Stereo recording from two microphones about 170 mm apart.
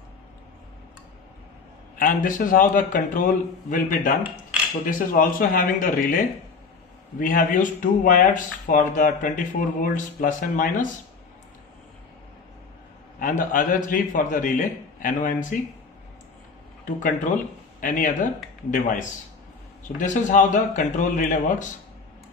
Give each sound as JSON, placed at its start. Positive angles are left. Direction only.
{"t": 2.0, "sound": "a man's voice", "side_deg": 55}
{"t": 13.2, "sound": "a man's voice", "side_deg": 55}
{"t": 16.8, "sound": "a man's voice", "side_deg": 50}